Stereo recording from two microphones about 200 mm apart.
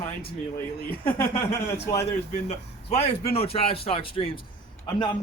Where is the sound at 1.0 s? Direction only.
10° left (ahead or behind).